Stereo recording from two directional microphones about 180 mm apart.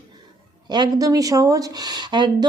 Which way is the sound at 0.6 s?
25° right (ahead or behind).